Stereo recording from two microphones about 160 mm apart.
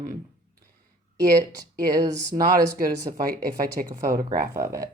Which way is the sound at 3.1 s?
60° right (ahead or behind).